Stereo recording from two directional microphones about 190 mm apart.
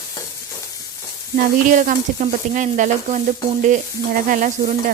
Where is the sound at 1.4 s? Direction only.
45° right (ahead or behind).